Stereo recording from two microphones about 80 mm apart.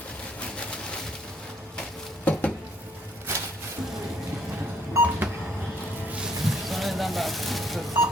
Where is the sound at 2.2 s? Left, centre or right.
Centre.